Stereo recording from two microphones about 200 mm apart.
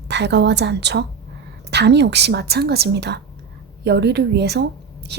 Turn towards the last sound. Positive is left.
turn(degrees=-55)  # may be behind; listen again after turning